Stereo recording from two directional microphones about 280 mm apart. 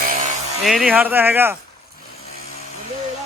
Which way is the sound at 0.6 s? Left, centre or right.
Centre.